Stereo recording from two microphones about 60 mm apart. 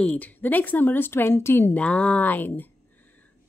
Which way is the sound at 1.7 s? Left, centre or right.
Left.